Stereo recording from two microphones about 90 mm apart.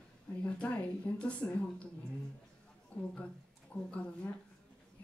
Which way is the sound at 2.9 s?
15° left (ahead or behind).